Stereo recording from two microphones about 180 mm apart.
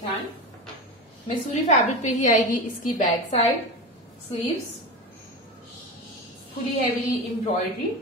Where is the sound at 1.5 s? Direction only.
40° left (ahead or behind).